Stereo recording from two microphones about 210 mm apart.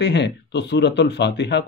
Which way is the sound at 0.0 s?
55° left (ahead or behind).